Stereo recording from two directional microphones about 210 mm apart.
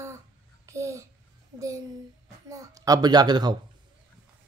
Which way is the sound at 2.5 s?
15° right (ahead or behind).